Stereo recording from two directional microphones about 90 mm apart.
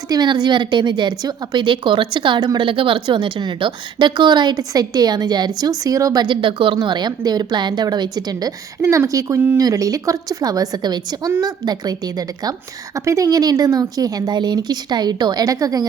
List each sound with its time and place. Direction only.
0.1 s a woman's voice: 50° right (ahead or behind)
6.2 s speech: 65° right (ahead or behind); by 8.5 s 45° right (ahead or behind)
8.8 s speech: 35° right (ahead or behind)